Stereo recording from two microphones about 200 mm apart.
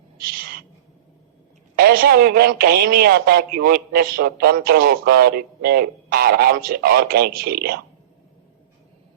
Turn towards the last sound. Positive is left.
turn(degrees=-50)  # may be behind; listen again after turning